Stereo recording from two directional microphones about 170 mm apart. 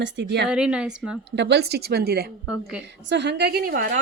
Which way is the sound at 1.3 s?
85° right.